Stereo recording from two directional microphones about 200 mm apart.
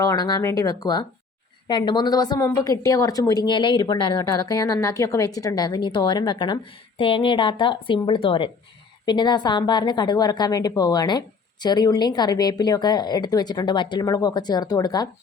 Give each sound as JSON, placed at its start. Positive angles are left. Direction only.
{"t": 0.0, "sound": "a woman's voice", "side_deg": 20}